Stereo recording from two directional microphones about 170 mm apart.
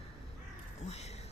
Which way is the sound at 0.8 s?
40° left (ahead or behind).